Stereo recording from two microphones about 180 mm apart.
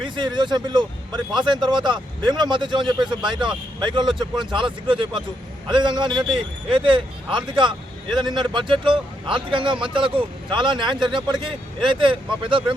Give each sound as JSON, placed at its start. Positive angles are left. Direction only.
{"t": 0.0, "sound": "speech", "side_deg": -25}